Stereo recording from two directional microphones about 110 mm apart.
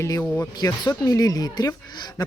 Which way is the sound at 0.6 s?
30° left (ahead or behind).